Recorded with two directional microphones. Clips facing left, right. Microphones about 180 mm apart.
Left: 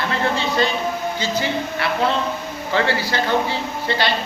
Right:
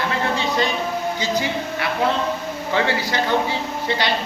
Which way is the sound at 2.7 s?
15° right (ahead or behind).